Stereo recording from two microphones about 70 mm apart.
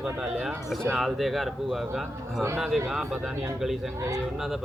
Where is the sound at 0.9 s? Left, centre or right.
Centre.